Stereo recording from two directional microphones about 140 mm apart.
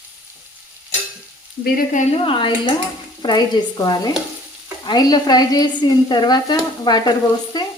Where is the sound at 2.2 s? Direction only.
35° left (ahead or behind).